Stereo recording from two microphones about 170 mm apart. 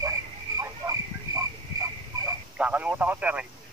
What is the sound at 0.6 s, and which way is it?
Frog, 20° right (ahead or behind).